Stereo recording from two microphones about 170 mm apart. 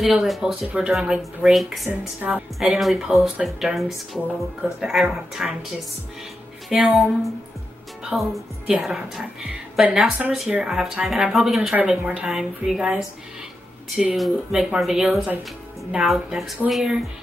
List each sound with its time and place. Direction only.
0.0 s speech: centre (ahead or behind)
6.7 s speech: centre (ahead or behind)